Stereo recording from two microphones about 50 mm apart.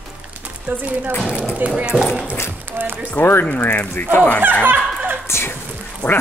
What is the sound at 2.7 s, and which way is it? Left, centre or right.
Speech, right.